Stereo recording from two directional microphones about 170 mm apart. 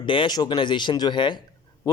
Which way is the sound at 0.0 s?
30° left (ahead or behind).